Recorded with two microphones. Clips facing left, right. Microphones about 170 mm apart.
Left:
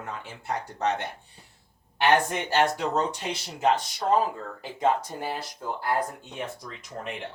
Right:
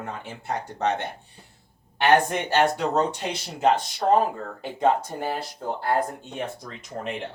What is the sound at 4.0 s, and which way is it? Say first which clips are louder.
Speech: right 5 dB; 55° right (ahead or behind).